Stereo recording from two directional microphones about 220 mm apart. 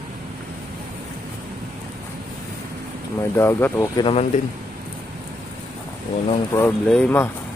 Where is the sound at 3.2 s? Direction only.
10° left (ahead or behind).